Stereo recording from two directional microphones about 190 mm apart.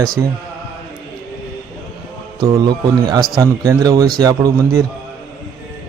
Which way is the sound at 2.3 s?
20° right (ahead or behind).